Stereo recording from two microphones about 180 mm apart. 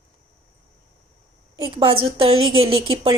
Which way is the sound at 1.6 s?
25° right (ahead or behind).